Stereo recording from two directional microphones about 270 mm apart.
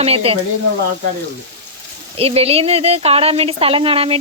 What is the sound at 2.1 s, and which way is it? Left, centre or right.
A woman's voice, right.